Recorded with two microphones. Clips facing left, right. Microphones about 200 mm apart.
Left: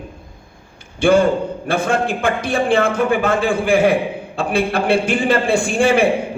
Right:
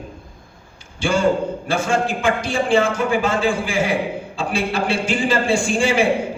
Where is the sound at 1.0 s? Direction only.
55° left (ahead or behind).